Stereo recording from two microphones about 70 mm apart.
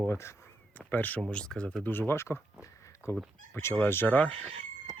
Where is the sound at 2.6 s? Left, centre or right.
Left.